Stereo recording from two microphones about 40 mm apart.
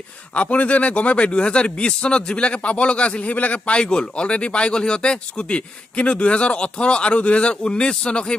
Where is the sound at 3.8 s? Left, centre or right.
Left.